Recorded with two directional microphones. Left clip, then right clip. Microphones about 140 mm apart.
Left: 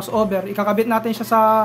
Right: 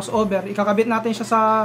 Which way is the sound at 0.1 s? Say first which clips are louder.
Left 1 dB; 25° left (ahead or behind).